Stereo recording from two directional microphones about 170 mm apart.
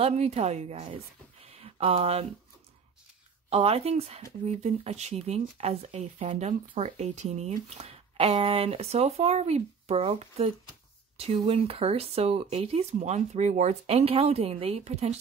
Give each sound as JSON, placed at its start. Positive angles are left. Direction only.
{"t": 0.0, "sound": "a woman's voice", "side_deg": -40}
{"t": 3.4, "sound": "speech", "side_deg": -35}